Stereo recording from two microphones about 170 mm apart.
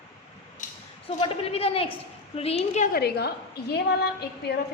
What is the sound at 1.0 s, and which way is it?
A woman's voice, 35° left (ahead or behind).